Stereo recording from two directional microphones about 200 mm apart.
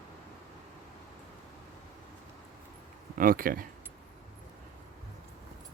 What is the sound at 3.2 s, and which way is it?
Speech, 45° right (ahead or behind).